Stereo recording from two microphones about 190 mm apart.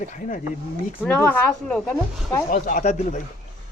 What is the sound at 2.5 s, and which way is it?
Speech, 45° left (ahead or behind).